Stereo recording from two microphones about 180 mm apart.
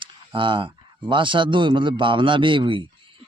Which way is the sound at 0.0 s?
30° right (ahead or behind).